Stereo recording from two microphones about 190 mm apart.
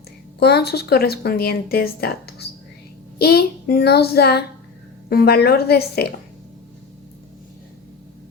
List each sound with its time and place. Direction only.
0.3 s speech: 60° left (ahead or behind)